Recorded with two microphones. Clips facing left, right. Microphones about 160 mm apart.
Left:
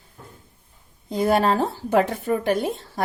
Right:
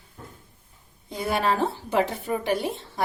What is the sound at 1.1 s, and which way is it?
Speech, 40° left (ahead or behind).